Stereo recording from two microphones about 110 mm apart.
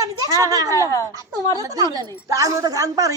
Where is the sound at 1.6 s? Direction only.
35° right (ahead or behind).